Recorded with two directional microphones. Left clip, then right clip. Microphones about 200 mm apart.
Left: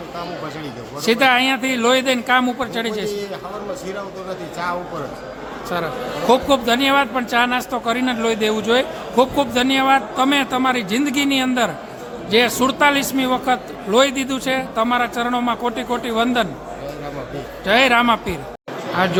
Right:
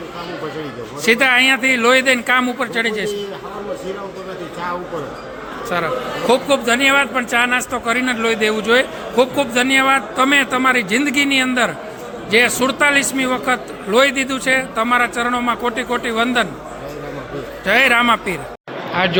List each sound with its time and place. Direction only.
1.0 s a man's voice: 15° left (ahead or behind)
5.6 s a man's voice: 15° left (ahead or behind)
17.7 s a man's voice: 15° left (ahead or behind)